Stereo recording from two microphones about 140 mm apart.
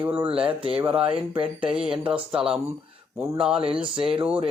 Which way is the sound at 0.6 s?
40° right (ahead or behind).